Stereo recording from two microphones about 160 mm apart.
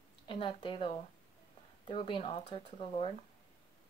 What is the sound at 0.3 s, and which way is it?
Speech, 30° left (ahead or behind).